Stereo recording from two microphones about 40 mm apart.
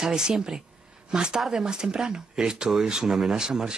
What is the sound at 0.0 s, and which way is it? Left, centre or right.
A woman's voice, centre.